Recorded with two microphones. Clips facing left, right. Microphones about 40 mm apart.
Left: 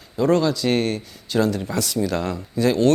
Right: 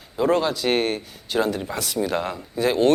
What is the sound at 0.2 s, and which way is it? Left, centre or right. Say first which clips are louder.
Speech: left 2 dB; centre.